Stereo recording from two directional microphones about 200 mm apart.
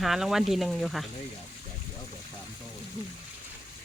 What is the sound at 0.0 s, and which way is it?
Speech, centre (ahead or behind).